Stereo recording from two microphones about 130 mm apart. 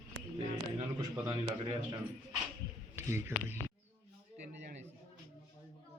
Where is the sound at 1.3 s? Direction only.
35° right (ahead or behind).